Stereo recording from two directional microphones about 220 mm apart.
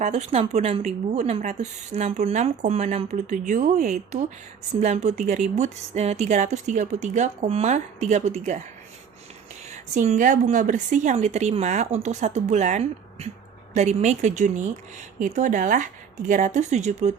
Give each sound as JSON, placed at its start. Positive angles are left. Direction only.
{"t": 0.0, "sound": "a woman's voice", "side_deg": -30}
{"t": 9.6, "sound": "a woman's voice", "side_deg": -30}